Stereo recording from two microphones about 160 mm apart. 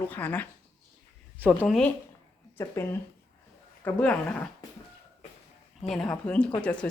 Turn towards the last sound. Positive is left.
turn(degrees=5)  # may be behind; listen again after turning